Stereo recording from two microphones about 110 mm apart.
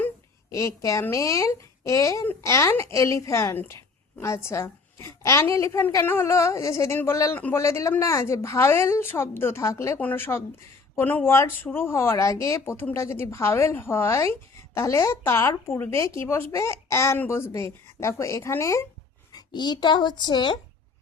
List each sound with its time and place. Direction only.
0.5 s speech: 30° left (ahead or behind)
19.3 s speech: 40° left (ahead or behind)